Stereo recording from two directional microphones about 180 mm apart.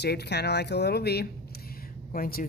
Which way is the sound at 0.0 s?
65° left (ahead or behind).